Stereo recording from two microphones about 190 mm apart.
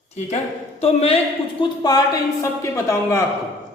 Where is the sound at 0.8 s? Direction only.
30° left (ahead or behind).